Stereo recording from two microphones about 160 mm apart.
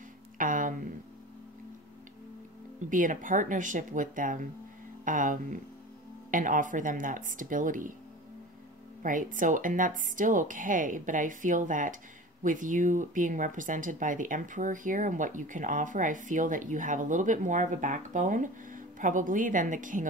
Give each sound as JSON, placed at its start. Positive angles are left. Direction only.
{"t": 0.4, "sound": "a sound", "side_deg": -55}
{"t": 2.9, "sound": "speech", "side_deg": -55}
{"t": 9.0, "sound": "speech", "side_deg": -55}